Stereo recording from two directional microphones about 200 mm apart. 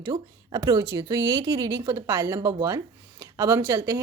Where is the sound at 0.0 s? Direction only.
20° right (ahead or behind).